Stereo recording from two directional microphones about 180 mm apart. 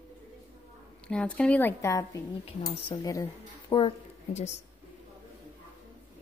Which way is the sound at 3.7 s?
35° left (ahead or behind).